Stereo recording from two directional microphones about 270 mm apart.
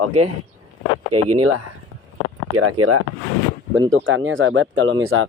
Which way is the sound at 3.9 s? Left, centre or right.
Right.